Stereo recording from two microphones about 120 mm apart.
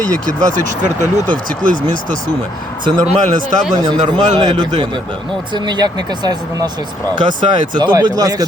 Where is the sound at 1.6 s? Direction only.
90° right.